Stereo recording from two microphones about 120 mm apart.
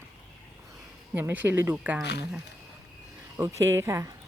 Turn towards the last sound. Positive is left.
turn(degrees=-25)  # may be behind; listen again after turning